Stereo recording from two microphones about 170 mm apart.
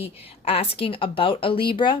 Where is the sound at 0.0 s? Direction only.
35° left (ahead or behind).